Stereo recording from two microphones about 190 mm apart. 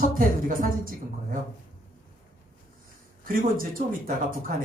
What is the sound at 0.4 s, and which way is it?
Speech, 45° right (ahead or behind).